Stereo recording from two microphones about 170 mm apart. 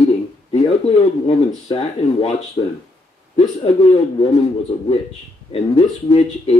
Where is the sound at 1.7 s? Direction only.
35° left (ahead or behind).